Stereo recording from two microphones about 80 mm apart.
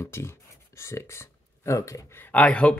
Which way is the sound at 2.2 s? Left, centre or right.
Centre.